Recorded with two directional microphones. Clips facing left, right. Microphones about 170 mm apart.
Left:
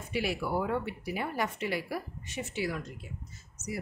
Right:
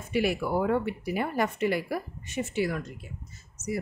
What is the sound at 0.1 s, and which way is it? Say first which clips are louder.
Speech: right 5 dB; 50° right (ahead or behind).